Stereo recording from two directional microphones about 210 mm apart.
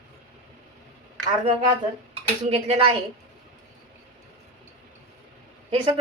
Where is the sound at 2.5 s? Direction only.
30° right (ahead or behind).